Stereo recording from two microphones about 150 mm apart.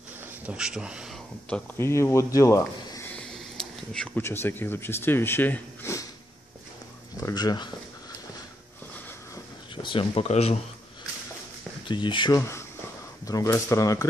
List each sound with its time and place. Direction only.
0.5 s speech: 5° right (ahead or behind)
1.5 s speech: 15° left (ahead or behind)
3.2 s a sound: 5° left (ahead or behind)
4.2 s speech: 15° left (ahead or behind)
7.2 s speech: 25° left (ahead or behind)
9.8 s speech: 35° left (ahead or behind)
11.9 s speech: 30° left (ahead or behind)
12.4 s speech: 20° left (ahead or behind)